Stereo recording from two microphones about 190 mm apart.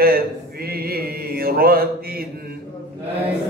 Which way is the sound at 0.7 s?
50° right (ahead or behind).